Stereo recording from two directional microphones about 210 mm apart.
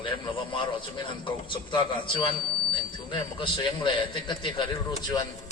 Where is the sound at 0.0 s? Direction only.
25° left (ahead or behind).